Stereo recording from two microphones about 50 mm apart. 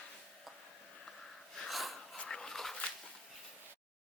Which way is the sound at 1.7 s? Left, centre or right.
Centre.